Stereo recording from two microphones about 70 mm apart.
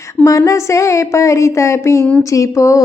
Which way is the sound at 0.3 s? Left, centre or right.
Left.